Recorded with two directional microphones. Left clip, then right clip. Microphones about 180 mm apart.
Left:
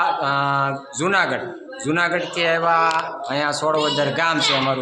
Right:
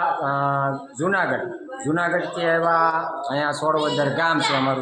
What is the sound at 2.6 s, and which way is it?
Mantra, 20° left (ahead or behind).